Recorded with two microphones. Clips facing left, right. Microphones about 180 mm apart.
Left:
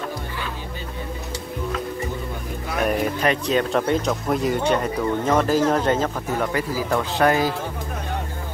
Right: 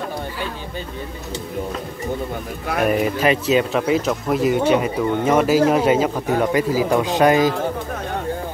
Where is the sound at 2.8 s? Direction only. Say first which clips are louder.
Right 3 dB; 5° right (ahead or behind).